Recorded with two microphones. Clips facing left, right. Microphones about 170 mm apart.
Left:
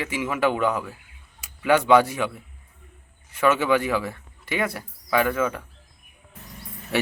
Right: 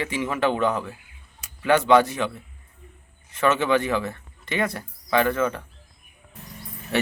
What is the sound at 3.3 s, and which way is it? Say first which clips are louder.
Speech: even; 10° left (ahead or behind).